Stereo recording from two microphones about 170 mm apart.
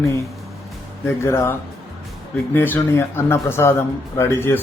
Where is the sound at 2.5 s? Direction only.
10° left (ahead or behind).